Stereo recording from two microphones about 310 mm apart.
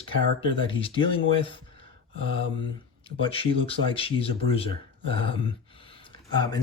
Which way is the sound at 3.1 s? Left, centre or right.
Centre.